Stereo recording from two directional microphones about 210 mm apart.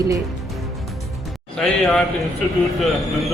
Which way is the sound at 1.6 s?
Centre (ahead or behind).